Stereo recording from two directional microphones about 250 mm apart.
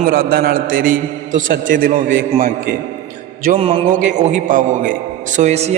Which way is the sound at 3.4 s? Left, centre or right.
Right.